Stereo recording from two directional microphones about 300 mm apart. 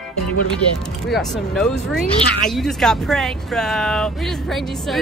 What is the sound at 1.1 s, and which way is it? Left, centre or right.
A woman's voice, centre.